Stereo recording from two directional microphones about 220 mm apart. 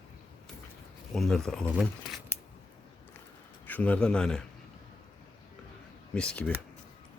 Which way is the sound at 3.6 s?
5° left (ahead or behind).